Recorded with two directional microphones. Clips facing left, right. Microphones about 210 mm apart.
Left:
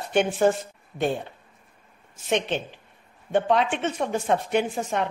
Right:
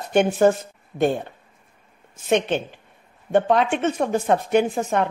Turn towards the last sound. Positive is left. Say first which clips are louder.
# right 5 dB
turn(degrees=-50)  # may be behind; listen again after turning